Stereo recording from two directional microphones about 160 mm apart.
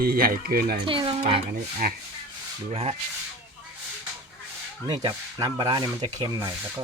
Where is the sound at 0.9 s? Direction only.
35° right (ahead or behind).